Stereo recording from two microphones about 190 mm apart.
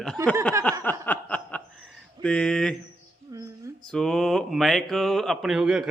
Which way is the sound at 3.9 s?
5° left (ahead or behind).